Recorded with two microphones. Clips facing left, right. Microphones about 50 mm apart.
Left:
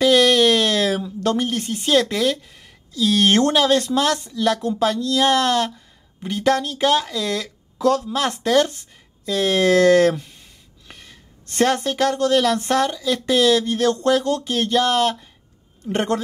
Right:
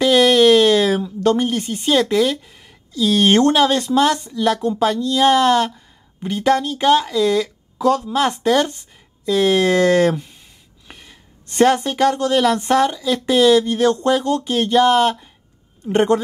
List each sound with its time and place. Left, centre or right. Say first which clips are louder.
0.0 s speech: right 2 dB; centre